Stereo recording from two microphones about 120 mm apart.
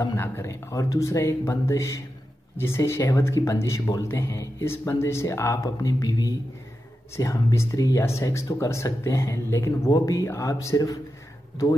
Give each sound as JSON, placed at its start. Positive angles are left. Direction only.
{"t": 0.2, "sound": "speech", "side_deg": 25}